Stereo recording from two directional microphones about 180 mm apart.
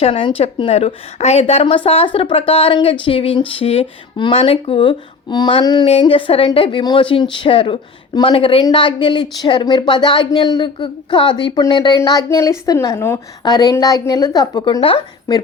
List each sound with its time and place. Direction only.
0.0 s a woman's voice: 30° left (ahead or behind)